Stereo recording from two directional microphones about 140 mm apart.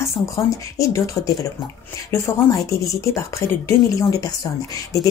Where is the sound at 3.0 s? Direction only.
20° left (ahead or behind).